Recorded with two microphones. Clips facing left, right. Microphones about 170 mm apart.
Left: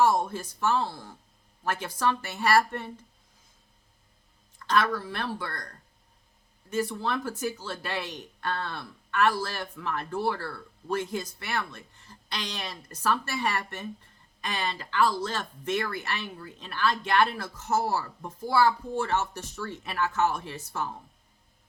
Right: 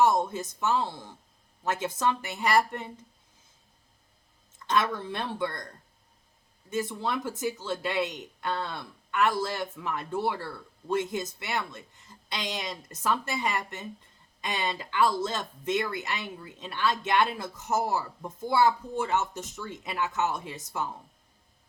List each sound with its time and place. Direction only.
0.0 s speech: 20° right (ahead or behind)
4.6 s speech: 20° right (ahead or behind)
6.7 s speech: 20° right (ahead or behind)